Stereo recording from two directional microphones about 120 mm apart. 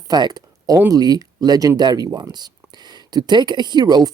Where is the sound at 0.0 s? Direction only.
35° right (ahead or behind).